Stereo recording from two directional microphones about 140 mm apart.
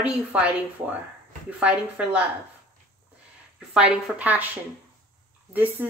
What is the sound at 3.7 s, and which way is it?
Speech, 5° right (ahead or behind).